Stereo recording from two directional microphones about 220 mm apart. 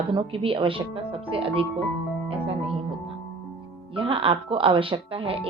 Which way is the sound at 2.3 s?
25° right (ahead or behind).